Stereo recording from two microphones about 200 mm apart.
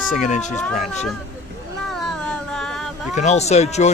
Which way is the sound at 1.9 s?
Centre (ahead or behind).